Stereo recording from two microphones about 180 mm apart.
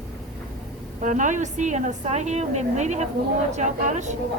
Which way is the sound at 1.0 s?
45° right (ahead or behind).